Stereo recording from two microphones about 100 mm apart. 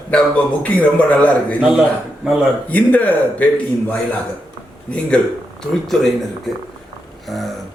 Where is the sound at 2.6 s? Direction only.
15° left (ahead or behind).